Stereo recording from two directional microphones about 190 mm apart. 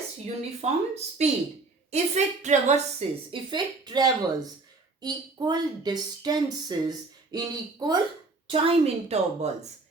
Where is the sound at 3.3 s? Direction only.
25° right (ahead or behind).